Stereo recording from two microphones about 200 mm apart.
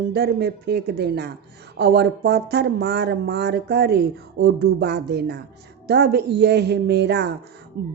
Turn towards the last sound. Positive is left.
turn(degrees=-50)  # may be behind; listen again after turning